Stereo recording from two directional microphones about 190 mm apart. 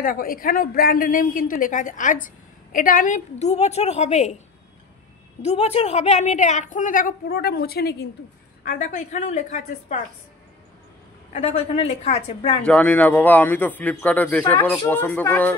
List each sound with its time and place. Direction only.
0.0 s speech: 50° left (ahead or behind)
5.4 s a woman's voice: 35° left (ahead or behind); by 8.1 s 55° left (ahead or behind)
8.6 s a woman's voice: 45° left (ahead or behind)
11.3 s a woman's voice: 35° left (ahead or behind)
12.6 s a man's voice: 5° left (ahead or behind)